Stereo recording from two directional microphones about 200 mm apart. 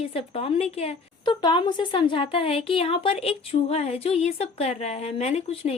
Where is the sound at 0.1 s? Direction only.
30° left (ahead or behind).